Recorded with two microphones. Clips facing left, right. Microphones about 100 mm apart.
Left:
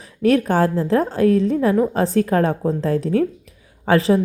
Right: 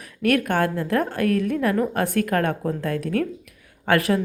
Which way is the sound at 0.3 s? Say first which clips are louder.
Left 4 dB; 30° left (ahead or behind).